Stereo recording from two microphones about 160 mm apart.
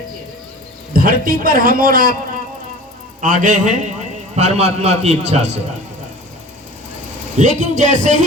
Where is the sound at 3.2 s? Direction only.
55° right (ahead or behind).